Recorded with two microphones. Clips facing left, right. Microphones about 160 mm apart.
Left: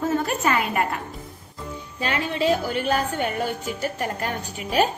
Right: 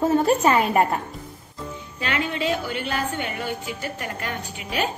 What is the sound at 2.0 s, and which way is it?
A woman's voice, 35° left (ahead or behind).